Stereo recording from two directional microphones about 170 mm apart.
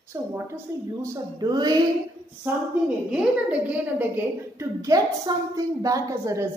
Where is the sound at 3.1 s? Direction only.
5° right (ahead or behind).